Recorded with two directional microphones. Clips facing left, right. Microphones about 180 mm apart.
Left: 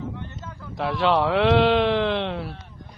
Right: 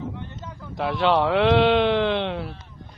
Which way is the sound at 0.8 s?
Centre (ahead or behind).